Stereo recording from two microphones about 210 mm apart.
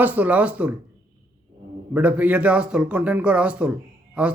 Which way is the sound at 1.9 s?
5° right (ahead or behind).